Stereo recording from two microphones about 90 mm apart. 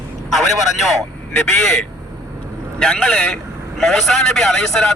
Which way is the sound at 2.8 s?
5° left (ahead or behind).